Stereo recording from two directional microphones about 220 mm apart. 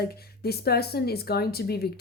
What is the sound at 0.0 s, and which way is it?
Speech, 45° left (ahead or behind).